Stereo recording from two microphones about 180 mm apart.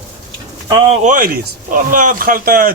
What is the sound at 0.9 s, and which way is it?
Speech, 45° right (ahead or behind).